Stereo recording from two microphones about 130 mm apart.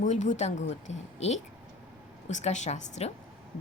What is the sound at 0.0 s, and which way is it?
Speech, 65° left (ahead or behind).